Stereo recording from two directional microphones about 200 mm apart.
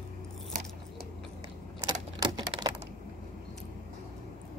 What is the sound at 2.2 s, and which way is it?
Typewriter, 20° right (ahead or behind).